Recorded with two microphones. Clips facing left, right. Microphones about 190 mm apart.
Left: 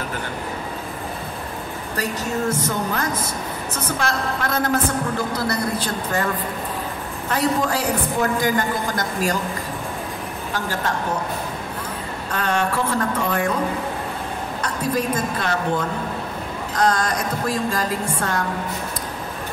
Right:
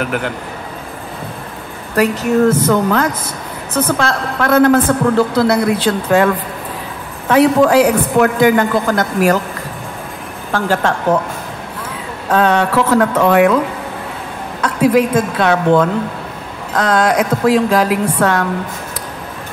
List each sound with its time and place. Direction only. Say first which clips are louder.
0.0 s speech: right 10 dB; 75° right (ahead or behind)
2.0 s a woman's voice: right 12 dB; 70° right (ahead or behind)
4.4 s a woman's voice: right 14 dB; 60° right (ahead or behind)
10.5 s a woman's voice: right 10 dB; 85° right
12.3 s a woman's voice: right 9 dB; 70° right (ahead or behind)
14.6 s a woman's voice: right 12 dB; 90° right; by 18.5 s 75° right (ahead or behind)